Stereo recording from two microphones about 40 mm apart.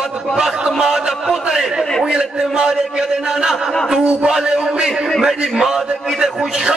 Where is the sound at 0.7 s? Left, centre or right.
Centre.